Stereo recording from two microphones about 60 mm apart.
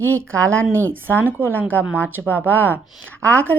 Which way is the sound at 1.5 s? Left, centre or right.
Left.